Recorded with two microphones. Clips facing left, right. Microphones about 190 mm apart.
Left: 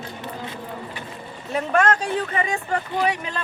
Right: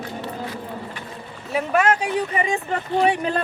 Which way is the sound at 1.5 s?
5° right (ahead or behind).